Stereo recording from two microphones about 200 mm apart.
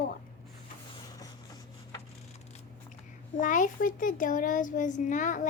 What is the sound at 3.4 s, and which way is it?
A child's voice, 40° left (ahead or behind).